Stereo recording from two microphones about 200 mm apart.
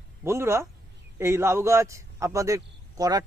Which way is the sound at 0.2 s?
15° right (ahead or behind).